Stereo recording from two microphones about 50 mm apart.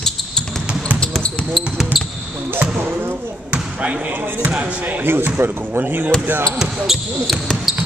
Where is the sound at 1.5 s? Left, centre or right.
Centre.